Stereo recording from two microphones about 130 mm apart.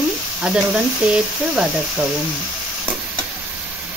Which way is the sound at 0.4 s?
10° right (ahead or behind).